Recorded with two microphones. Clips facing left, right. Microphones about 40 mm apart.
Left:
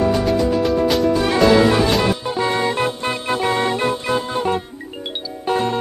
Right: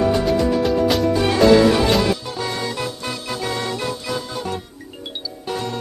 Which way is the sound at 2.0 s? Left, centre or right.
Left.